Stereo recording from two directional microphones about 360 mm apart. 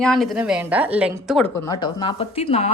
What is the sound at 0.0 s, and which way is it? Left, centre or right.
A woman's voice, centre.